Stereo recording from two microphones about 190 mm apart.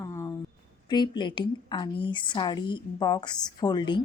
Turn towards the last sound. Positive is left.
turn(degrees=20)  # may be behind; listen again after turning